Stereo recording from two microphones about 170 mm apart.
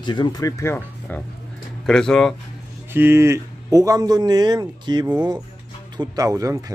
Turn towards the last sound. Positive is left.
turn(degrees=-20)  # may be behind; listen again after turning